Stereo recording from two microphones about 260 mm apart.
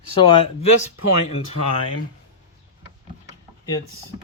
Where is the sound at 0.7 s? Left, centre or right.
Left.